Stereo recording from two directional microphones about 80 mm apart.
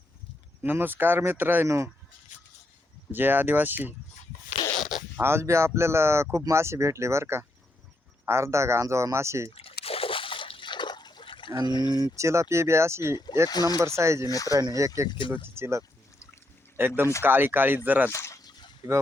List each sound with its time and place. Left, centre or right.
0.6 s speech: right
1.6 s speech: right
3.1 s speech: right
4.7 s zipper: centre
5.1 s speech: right
10.1 s water: left
11.6 s speech: left
12.1 s speech: right
13.5 s speech: left
13.8 s speech: right
14.3 s speech: left
14.7 s speech: right
18.1 s speech: left
18.8 s speech: right